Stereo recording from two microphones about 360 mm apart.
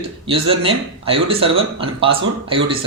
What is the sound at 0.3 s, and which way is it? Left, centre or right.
Speech, centre.